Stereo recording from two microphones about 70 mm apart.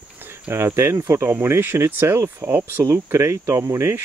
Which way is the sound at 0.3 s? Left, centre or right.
Right.